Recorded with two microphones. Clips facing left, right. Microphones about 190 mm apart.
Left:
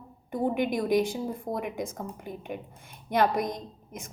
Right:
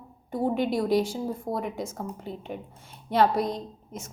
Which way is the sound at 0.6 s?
15° left (ahead or behind).